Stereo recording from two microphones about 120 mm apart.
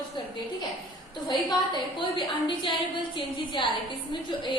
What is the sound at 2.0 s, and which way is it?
A woman's voice, 40° left (ahead or behind).